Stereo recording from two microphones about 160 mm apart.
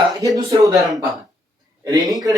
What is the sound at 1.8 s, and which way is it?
Speech, 25° right (ahead or behind).